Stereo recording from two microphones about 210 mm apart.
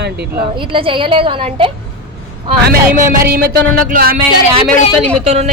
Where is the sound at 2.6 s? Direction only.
40° right (ahead or behind).